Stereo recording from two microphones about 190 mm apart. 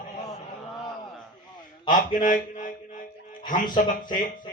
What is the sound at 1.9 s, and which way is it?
A man's voice, 45° left (ahead or behind).